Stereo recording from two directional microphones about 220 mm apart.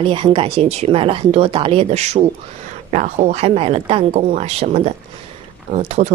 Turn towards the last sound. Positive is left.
turn(degrees=-30)  # may be behind; listen again after turning